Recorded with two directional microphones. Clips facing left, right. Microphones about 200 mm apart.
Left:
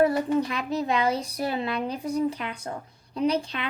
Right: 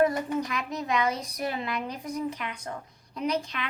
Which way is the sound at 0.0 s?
30° left (ahead or behind).